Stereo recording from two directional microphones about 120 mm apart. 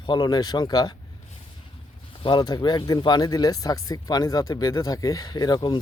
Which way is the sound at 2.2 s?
40° left (ahead or behind).